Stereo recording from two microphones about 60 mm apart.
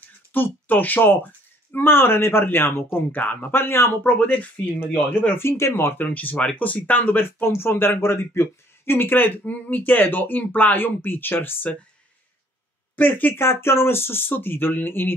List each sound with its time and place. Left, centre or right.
0.3 s speech: left
3.2 s speech: left
3.5 s speech: left
4.0 s speech: left
5.4 s speech: left
6.1 s speech: left
12.9 s speech: left